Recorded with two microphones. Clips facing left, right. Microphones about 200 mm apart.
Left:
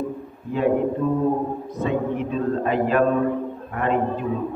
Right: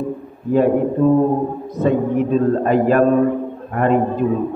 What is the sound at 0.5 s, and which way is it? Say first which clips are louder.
A man's voice: right 5 dB; 45° right (ahead or behind).